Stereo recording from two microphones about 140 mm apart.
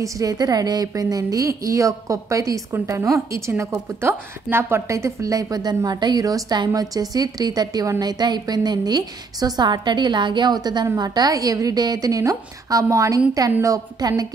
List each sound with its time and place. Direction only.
0.0 s a woman's voice: 25° right (ahead or behind)